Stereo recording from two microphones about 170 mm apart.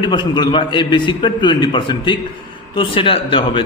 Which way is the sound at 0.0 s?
25° left (ahead or behind).